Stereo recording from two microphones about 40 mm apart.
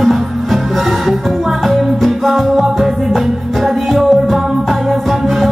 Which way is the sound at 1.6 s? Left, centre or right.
Centre.